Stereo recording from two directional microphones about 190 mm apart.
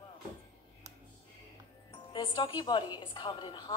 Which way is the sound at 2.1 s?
25° left (ahead or behind).